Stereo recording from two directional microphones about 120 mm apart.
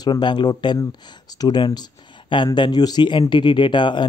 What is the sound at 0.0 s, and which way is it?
Speech, 40° left (ahead or behind).